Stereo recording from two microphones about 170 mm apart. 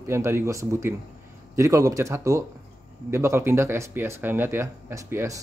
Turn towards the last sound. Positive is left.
turn(degrees=-15)  # may be behind; listen again after turning